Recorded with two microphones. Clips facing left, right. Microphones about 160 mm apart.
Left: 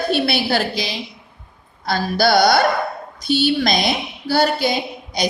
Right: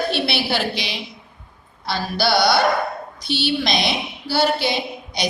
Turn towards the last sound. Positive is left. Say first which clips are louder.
# left 2 dB
turn(degrees=45)  # may be behind; listen again after turning